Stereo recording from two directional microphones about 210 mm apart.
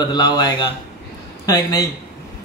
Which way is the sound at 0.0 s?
20° left (ahead or behind).